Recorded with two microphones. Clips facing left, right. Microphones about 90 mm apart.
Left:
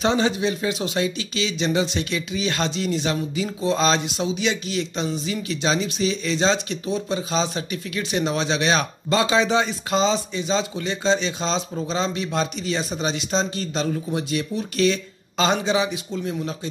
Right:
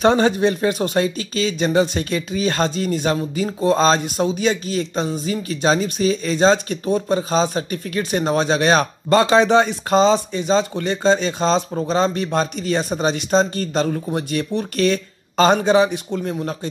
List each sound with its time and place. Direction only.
0.0 s speech: 50° right (ahead or behind)